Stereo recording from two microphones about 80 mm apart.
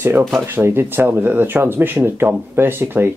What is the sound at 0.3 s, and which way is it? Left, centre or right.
Speech, right.